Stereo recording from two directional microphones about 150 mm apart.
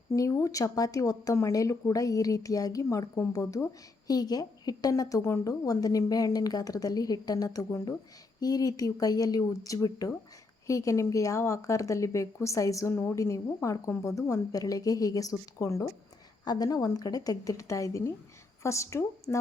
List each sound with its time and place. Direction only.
0.1 s speech: 20° left (ahead or behind)